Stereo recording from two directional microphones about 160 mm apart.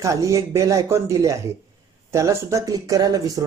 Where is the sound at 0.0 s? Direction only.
20° right (ahead or behind).